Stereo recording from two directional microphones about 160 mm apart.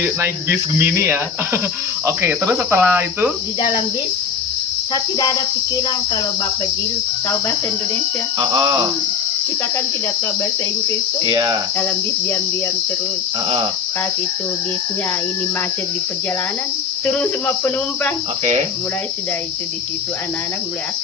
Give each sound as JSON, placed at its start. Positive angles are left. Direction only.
{"t": 0.0, "sound": "cricket", "side_deg": -15}
{"t": 11.3, "sound": "cricket", "side_deg": -20}
{"t": 17.1, "sound": "cricket", "side_deg": 10}